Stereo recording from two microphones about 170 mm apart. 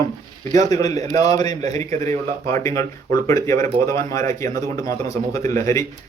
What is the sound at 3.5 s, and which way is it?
Speech, 40° right (ahead or behind).